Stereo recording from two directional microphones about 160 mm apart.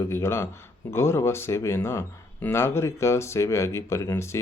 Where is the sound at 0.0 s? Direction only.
15° left (ahead or behind).